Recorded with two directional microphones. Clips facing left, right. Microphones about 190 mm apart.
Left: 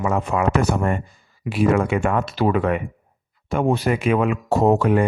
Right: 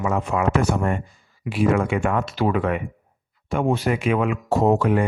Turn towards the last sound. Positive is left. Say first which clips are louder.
# left 2 dB
turn(degrees=40)  # may be behind; listen again after turning